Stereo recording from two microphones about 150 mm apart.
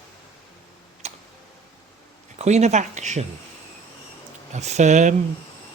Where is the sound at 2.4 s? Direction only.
50° right (ahead or behind).